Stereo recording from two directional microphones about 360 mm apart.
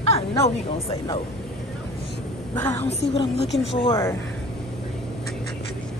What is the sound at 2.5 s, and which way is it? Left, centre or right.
Speech, centre.